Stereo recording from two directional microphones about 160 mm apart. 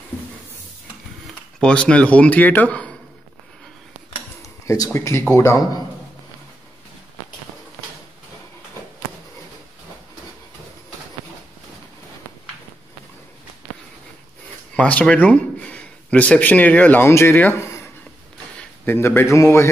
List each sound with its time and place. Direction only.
1.6 s speech: 5° left (ahead or behind)
4.4 s a sound: 20° left (ahead or behind)
5.3 s speech: 15° left (ahead or behind)
14.8 s speech: 10° left (ahead or behind)
18.9 s speech: 15° left (ahead or behind)